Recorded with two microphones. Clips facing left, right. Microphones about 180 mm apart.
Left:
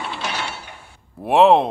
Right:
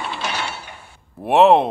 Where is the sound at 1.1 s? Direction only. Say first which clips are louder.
Right 1 dB; centre (ahead or behind).